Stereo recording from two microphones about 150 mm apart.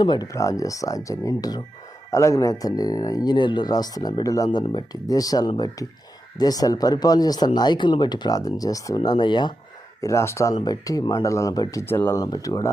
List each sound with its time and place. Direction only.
0.0 s a man's voice: 30° left (ahead or behind)
10.0 s a man's voice: 20° left (ahead or behind)
12.2 s a man's voice: 25° left (ahead or behind)